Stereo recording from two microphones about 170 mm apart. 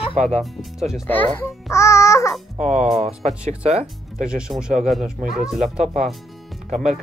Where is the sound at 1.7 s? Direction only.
15° left (ahead or behind).